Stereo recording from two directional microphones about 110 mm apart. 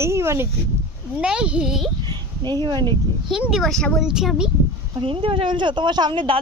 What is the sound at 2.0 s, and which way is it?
Speech, 40° right (ahead or behind).